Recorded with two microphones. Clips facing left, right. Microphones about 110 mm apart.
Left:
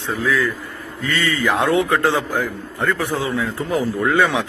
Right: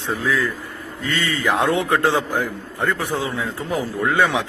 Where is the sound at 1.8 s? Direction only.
20° right (ahead or behind).